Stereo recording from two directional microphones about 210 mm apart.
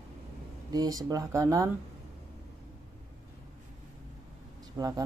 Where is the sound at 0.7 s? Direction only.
15° right (ahead or behind).